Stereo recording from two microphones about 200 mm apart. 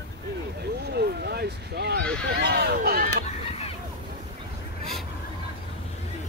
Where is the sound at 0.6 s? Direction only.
55° right (ahead or behind).